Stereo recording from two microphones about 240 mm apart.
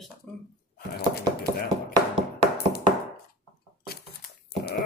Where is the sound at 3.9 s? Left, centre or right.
Left.